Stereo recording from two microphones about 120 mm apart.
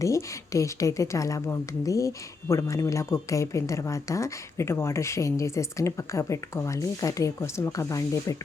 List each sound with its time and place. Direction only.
0.0 s a woman's voice: 25° left (ahead or behind)